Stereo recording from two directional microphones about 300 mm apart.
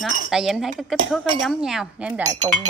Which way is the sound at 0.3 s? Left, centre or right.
Centre.